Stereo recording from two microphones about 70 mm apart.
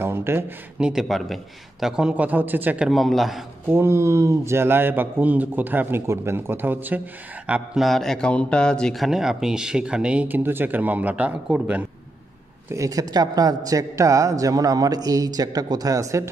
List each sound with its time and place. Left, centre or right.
0.0 s a sound: right
0.7 s speech: centre
1.0 s a man's voice: centre; by 2.8 s right
2.9 s a man's voice: centre
3.6 s a man's voice: right
7.7 s a man's voice: centre
8.9 s a man's voice: centre
10.2 s speech: right
12.6 s a man's voice: right